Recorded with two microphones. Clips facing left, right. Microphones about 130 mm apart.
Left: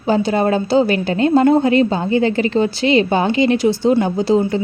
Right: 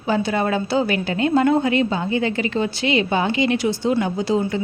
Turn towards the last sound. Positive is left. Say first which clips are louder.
# left 5 dB
turn(degrees=30)  # may be behind; listen again after turning